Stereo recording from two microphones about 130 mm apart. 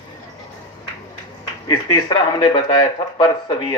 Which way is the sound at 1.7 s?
30° left (ahead or behind).